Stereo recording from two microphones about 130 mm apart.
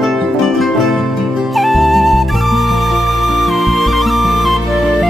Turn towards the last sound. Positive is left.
turn(degrees=0)  # may be behind; listen again after turning